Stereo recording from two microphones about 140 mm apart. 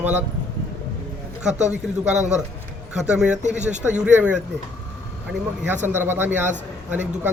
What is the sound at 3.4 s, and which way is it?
Speech, 55° right (ahead or behind).